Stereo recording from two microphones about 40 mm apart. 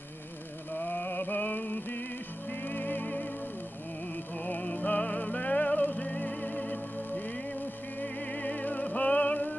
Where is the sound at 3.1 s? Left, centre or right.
Left.